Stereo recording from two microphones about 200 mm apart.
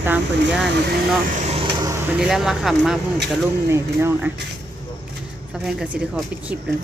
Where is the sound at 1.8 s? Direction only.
15° right (ahead or behind).